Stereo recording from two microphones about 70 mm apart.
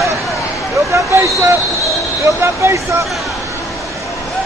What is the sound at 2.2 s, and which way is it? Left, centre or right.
Speech, right.